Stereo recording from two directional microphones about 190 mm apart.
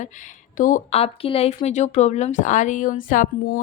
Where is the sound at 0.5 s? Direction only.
45° left (ahead or behind).